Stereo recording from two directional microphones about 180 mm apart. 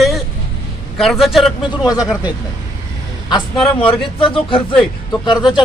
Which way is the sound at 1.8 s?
20° left (ahead or behind).